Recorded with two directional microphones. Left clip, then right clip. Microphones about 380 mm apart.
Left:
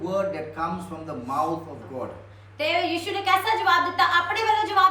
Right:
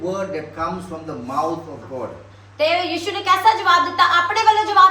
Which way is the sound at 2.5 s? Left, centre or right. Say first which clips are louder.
Right 5 dB; centre.